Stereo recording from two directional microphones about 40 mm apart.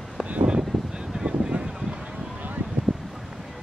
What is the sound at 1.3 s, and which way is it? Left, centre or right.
Boat, right.